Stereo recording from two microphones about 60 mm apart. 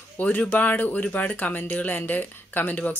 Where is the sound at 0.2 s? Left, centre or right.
Left.